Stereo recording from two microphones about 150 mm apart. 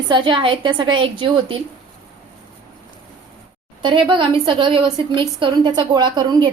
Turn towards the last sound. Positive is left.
turn(degrees=-30)  # may be behind; listen again after turning